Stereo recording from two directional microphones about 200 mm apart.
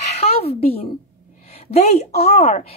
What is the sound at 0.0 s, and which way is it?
A woman's voice, 30° left (ahead or behind).